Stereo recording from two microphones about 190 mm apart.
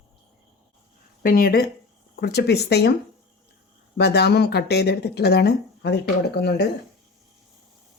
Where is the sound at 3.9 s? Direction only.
60° left (ahead or behind).